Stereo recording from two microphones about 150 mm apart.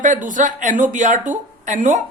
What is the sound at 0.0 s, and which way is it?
A woman's voice, 60° right (ahead or behind).